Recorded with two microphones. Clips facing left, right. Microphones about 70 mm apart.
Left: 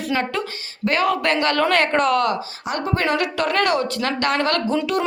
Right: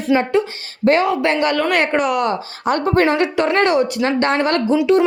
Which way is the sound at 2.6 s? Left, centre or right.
Right.